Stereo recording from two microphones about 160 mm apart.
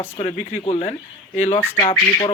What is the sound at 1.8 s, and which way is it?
Speech, 30° left (ahead or behind).